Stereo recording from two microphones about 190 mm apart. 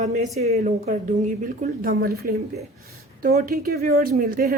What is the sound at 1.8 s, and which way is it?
Speech, 55° right (ahead or behind).